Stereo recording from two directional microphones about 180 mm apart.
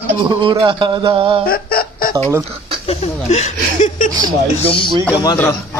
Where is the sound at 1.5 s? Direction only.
55° left (ahead or behind).